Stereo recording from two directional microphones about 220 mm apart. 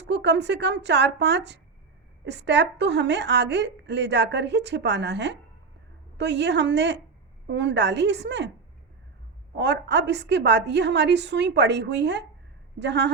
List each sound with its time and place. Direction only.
0.0 s a woman's voice: 50° right (ahead or behind)
9.6 s a woman's voice: 50° right (ahead or behind)